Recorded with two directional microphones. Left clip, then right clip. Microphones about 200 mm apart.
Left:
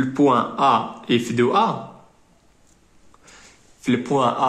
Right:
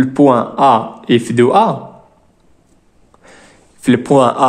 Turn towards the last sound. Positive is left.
turn(degrees=-55)  # may be behind; listen again after turning